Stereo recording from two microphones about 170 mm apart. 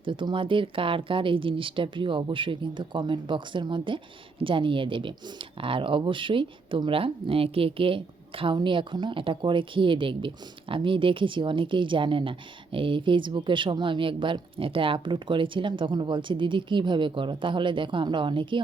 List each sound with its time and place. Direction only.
0.0 s speech: 30° right (ahead or behind)